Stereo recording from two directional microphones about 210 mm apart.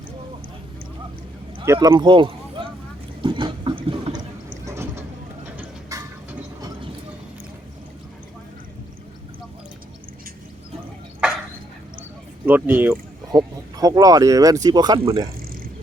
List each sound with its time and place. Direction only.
1.5 s speech: 15° right (ahead or behind)
3.2 s water: 25° right (ahead or behind)
4.6 s vehicle: 15° right (ahead or behind)
5.9 s a sound: 15° right (ahead or behind)
12.5 s speech: 10° right (ahead or behind)